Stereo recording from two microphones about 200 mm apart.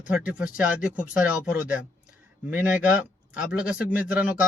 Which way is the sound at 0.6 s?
5° right (ahead or behind).